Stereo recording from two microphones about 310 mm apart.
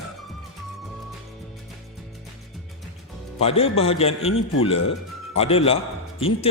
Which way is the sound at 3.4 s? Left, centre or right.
Centre.